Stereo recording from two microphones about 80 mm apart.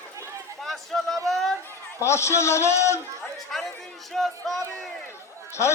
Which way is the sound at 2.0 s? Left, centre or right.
Left.